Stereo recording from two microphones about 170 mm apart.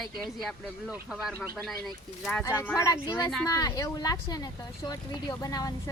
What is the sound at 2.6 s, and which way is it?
Speech, 20° left (ahead or behind).